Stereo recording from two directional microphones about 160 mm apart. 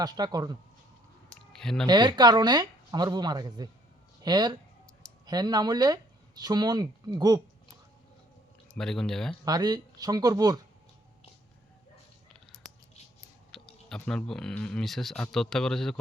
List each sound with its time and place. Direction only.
0.0 s speech: 25° right (ahead or behind)
1.5 s speech: 5° left (ahead or behind)
1.9 s speech: 25° right (ahead or behind)
8.7 s speech: 5° left (ahead or behind)
9.4 s speech: 25° right (ahead or behind)
13.5 s speech: 5° left (ahead or behind)